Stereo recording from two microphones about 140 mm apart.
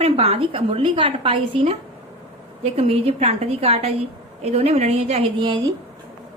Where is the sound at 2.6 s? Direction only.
45° right (ahead or behind).